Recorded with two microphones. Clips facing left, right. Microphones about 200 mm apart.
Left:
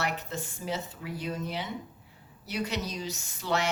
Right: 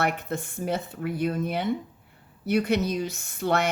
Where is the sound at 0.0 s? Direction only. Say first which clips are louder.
Right 6 dB; 55° right (ahead or behind).